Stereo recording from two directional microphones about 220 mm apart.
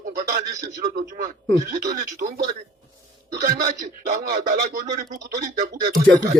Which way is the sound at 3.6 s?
45° right (ahead or behind).